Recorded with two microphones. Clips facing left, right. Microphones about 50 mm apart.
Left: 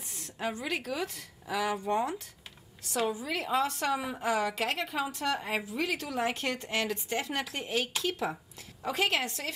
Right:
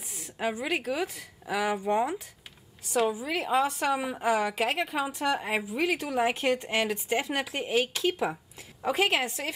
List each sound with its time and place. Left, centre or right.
0.1 s a woman's voice: centre